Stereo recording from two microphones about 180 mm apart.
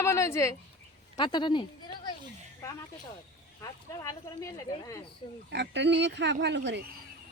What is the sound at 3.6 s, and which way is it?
A woman's voice, 20° left (ahead or behind).